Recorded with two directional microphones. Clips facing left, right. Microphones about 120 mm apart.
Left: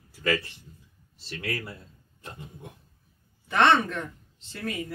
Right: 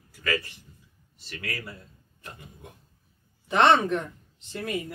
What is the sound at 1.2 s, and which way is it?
Speech, 25° left (ahead or behind).